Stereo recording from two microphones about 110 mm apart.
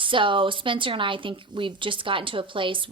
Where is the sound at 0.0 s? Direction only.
50° right (ahead or behind).